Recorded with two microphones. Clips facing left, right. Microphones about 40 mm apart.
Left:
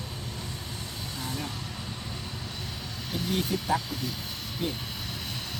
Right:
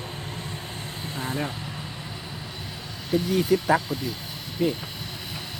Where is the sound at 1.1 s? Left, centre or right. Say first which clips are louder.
Right 7 dB; right.